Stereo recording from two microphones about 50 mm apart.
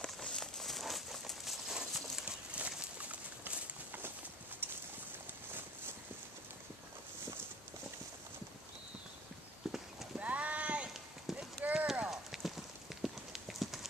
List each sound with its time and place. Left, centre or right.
0.0 s a sound: centre
0.4 s crumpling: centre
2.2 s clip-clop: right
4.6 s a sound: right
9.6 s clip-clop: centre
10.1 s clip-clop: right
11.3 s clip-clop: centre
11.6 s clip-clop: right
12.1 s clip-clop: centre